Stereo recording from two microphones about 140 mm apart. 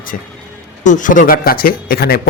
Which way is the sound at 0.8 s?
65° left (ahead or behind).